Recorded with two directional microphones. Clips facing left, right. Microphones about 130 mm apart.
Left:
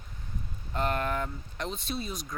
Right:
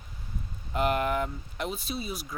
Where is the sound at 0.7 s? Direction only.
15° right (ahead or behind).